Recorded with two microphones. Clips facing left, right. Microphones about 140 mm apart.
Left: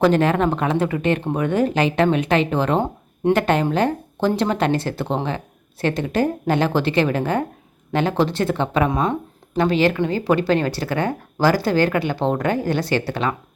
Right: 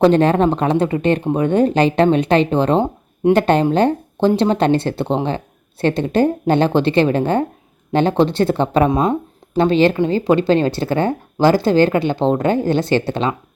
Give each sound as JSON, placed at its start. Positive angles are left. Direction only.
{"t": 0.0, "sound": "speech", "side_deg": -30}